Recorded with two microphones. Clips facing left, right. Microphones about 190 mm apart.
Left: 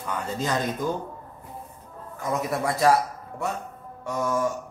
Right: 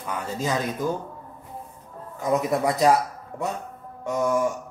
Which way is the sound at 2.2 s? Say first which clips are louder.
Right 4 dB; 20° right (ahead or behind).